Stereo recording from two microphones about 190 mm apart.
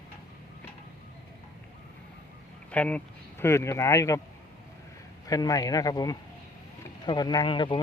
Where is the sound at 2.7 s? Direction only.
5° left (ahead or behind).